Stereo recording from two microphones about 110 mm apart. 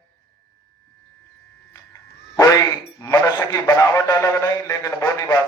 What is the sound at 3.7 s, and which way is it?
A man's voice, 30° left (ahead or behind).